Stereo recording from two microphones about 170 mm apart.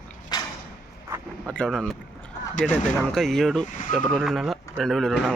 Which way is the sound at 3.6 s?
50° left (ahead or behind).